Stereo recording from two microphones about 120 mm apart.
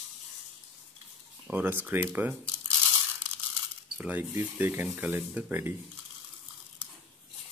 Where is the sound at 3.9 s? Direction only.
15° right (ahead or behind).